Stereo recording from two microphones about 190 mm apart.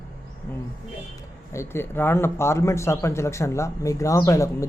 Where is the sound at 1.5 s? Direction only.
15° left (ahead or behind).